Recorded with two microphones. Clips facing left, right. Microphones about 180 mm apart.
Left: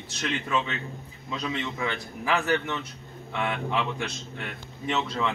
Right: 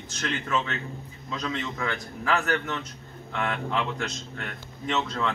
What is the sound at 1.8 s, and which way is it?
Speech, 15° left (ahead or behind).